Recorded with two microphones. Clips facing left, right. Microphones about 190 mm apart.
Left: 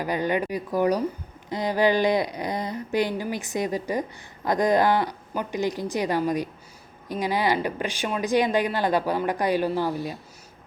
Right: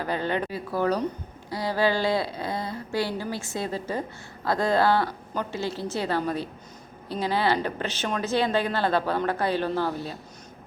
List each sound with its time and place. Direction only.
0.0 s speech: 15° left (ahead or behind)